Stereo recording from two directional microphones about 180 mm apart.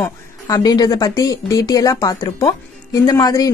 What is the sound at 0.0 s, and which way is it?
A woman's voice, 20° left (ahead or behind).